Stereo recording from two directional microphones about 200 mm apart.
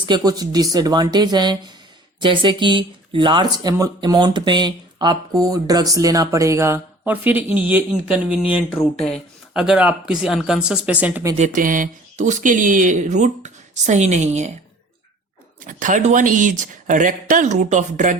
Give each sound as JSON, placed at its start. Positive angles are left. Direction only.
{"t": 0.0, "sound": "speech", "side_deg": -20}
{"t": 11.3, "sound": "speech", "side_deg": -40}
{"t": 15.6, "sound": "speech", "side_deg": -40}